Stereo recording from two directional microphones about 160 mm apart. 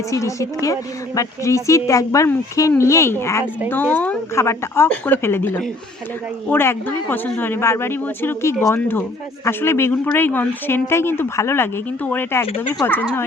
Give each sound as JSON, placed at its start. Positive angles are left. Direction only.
{"t": 0.1, "sound": "a woman's voice", "side_deg": 20}